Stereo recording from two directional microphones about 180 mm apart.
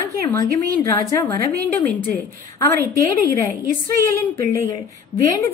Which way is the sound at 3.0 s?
20° left (ahead or behind).